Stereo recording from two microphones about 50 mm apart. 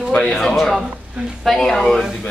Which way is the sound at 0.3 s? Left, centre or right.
Centre.